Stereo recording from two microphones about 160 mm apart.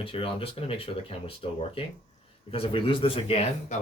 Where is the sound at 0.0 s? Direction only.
35° left (ahead or behind).